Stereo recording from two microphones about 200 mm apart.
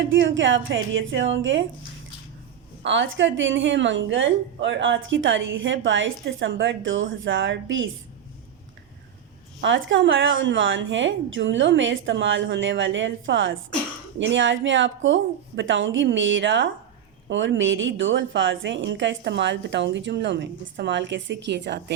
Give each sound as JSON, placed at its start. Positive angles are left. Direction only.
{"t": 0.0, "sound": "a woman's voice", "side_deg": -65}
{"t": 2.8, "sound": "a woman's voice", "side_deg": -65}
{"t": 9.6, "sound": "a woman's voice", "side_deg": -65}